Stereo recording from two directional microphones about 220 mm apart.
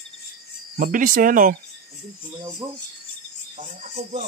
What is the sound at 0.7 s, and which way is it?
Speech, 40° right (ahead or behind).